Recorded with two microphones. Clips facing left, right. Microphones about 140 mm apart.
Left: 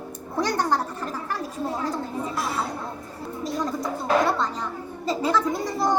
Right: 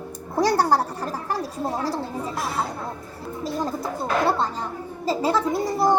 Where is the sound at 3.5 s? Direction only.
30° right (ahead or behind).